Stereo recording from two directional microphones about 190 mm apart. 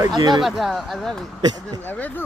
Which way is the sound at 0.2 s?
25° right (ahead or behind).